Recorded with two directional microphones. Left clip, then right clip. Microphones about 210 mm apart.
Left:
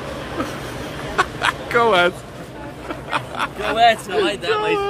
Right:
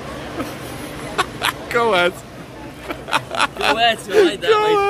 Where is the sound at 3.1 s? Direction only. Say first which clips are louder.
Right 5 dB; 30° right (ahead or behind).